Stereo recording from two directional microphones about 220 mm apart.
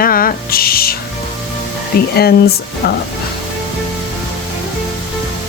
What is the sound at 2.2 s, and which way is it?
Speech, 45° left (ahead or behind).